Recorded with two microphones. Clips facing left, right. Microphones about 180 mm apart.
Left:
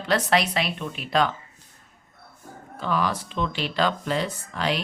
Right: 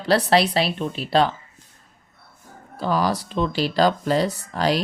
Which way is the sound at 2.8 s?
35° right (ahead or behind).